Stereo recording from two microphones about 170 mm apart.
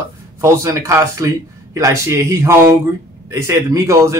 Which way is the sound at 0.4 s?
15° right (ahead or behind).